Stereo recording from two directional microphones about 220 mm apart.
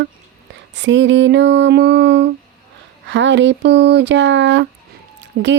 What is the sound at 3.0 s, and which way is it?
Speech, 55° right (ahead or behind).